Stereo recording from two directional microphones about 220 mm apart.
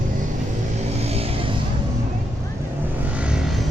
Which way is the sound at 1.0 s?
25° right (ahead or behind).